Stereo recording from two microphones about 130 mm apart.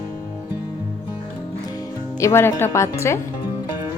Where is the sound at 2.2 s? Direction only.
20° left (ahead or behind).